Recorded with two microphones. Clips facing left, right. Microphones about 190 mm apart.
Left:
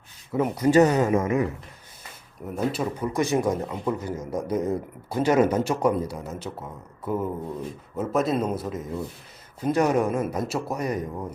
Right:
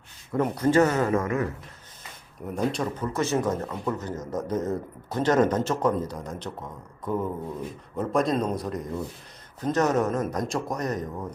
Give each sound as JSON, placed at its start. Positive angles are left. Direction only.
{"t": 0.3, "sound": "speech", "side_deg": 10}
{"t": 2.4, "sound": "a man's voice", "side_deg": 0}